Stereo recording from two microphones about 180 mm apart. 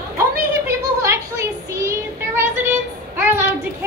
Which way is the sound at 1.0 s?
15° right (ahead or behind).